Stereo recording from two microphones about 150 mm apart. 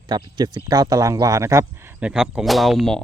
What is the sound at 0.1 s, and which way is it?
Speech, 30° right (ahead or behind).